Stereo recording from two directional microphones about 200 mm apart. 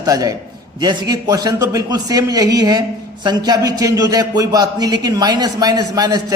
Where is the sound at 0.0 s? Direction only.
15° right (ahead or behind).